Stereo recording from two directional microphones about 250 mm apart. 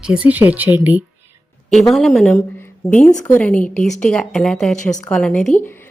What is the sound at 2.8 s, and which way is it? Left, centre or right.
Speech, left.